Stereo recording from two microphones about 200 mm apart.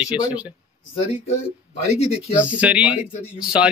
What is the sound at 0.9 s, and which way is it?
Speech, 30° left (ahead or behind).